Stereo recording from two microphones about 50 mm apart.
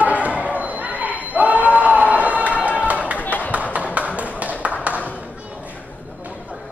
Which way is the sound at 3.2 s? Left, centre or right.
Left.